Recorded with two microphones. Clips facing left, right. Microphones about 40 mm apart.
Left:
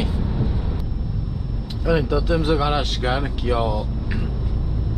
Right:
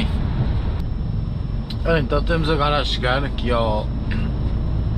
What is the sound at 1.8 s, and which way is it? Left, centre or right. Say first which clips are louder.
Speech: right 1 dB; right.